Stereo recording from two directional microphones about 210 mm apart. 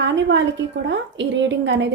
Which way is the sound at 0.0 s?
60° right (ahead or behind).